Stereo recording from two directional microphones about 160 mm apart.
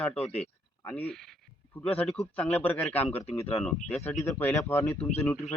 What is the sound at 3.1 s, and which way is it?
Speech, 40° left (ahead or behind).